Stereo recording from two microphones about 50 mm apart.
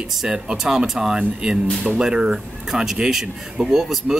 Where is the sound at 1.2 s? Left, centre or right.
Right.